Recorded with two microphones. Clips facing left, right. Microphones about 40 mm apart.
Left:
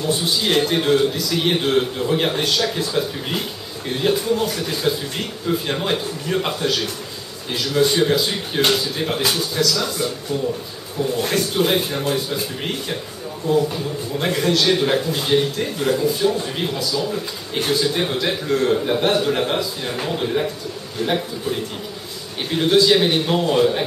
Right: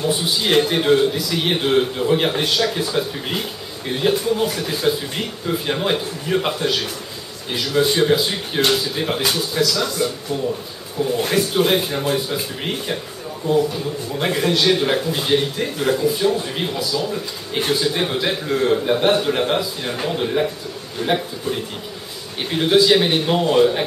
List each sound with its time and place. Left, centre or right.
0.0 s a man's voice: centre
11.2 s a man's voice: centre